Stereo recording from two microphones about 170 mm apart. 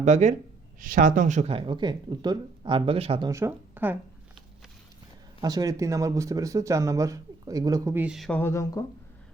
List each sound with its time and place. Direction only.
0.0 s speech: 45° right (ahead or behind)
3.2 s speech: 15° right (ahead or behind)
5.4 s speech: 20° right (ahead or behind); by 8.4 s centre (ahead or behind)
8.4 s speech: 15° left (ahead or behind)